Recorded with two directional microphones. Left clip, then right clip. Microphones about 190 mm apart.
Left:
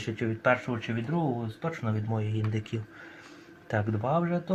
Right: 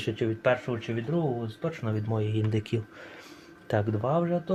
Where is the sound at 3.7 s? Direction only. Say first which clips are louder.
Right 1 dB; 40° right (ahead or behind).